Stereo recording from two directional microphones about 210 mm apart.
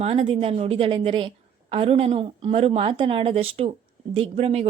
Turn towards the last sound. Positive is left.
turn(degrees=-25)  # may be behind; listen again after turning